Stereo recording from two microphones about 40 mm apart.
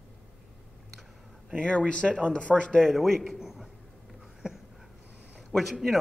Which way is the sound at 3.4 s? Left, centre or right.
Centre.